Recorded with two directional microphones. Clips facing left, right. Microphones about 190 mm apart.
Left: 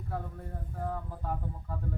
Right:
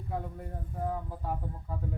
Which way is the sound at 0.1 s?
15° right (ahead or behind).